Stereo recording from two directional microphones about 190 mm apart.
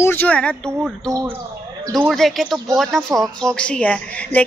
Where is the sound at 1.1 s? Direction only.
15° right (ahead or behind).